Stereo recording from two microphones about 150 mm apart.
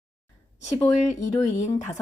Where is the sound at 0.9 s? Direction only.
50° left (ahead or behind).